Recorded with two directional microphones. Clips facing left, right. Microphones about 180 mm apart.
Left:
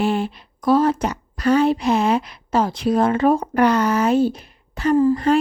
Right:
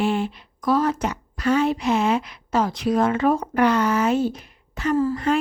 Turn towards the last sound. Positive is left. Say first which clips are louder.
# left 5 dB
turn(degrees=35)  # may be behind; listen again after turning